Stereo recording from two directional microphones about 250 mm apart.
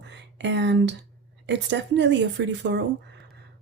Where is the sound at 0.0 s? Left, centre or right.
Right.